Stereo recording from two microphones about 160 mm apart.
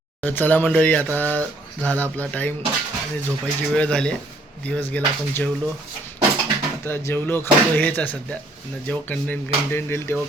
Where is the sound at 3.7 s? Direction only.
5° left (ahead or behind).